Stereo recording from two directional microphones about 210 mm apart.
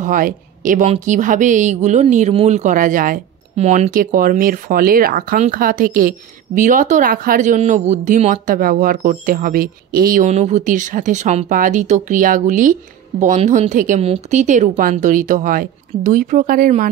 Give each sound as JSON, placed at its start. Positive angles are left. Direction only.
{"t": 0.0, "sound": "a woman's voice", "side_deg": -40}